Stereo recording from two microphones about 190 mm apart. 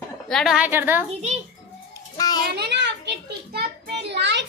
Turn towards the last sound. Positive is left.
turn(degrees=-65)  # may be behind; listen again after turning